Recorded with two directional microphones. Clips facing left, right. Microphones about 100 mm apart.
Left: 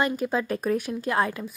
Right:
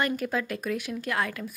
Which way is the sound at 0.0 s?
30° left (ahead or behind).